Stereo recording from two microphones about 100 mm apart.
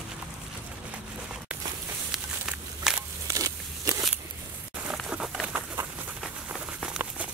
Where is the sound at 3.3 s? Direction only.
30° right (ahead or behind).